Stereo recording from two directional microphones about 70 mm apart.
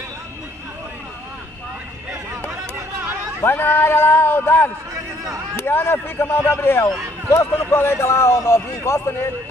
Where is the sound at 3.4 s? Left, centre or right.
Left.